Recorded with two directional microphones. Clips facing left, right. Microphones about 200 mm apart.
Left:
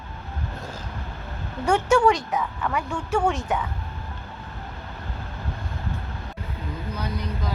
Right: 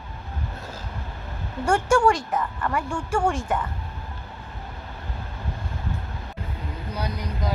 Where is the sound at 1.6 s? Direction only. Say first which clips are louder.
Left 1 dB; 10° right (ahead or behind).